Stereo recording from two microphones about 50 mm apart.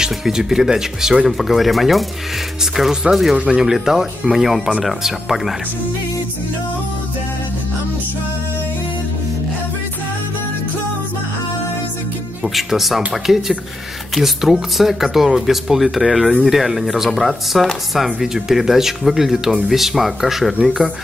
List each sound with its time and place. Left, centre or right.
0.0 s speech: centre
12.5 s speech: centre